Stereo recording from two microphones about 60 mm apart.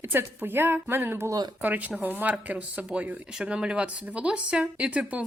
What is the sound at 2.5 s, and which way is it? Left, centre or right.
Speech, centre.